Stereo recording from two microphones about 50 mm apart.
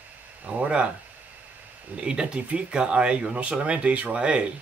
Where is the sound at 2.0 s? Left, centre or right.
Centre.